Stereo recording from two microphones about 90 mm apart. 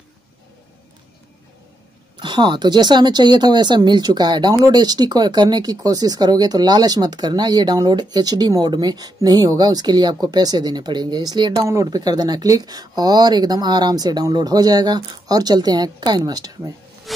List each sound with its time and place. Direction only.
2.1 s speech: 60° right (ahead or behind)
11.6 s speech: 35° right (ahead or behind)